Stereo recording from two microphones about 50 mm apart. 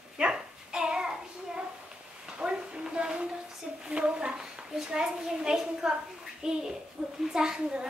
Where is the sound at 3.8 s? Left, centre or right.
Centre.